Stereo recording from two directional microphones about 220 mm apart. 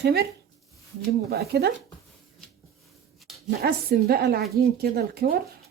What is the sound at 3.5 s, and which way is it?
Speech, 45° right (ahead or behind).